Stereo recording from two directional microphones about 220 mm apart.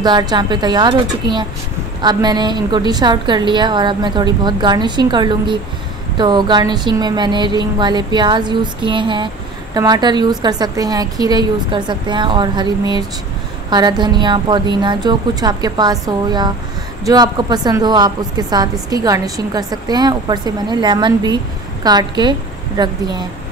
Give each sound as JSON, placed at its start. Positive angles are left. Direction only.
{"t": 0.0, "sound": "a woman's voice", "side_deg": -20}